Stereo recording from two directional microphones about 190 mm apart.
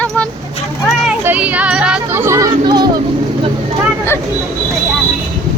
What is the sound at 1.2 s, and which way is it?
Speech, 10° right (ahead or behind).